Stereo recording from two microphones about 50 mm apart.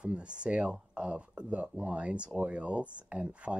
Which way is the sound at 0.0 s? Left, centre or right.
Right.